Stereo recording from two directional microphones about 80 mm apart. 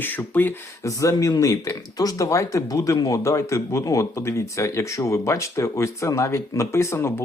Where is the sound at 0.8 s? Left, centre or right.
Left.